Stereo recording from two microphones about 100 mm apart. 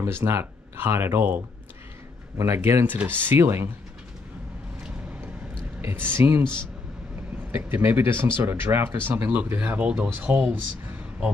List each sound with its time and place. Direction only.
0.0 s speech: 25° right (ahead or behind)
5.8 s speech: 25° right (ahead or behind)
7.5 s speech: 25° right (ahead or behind)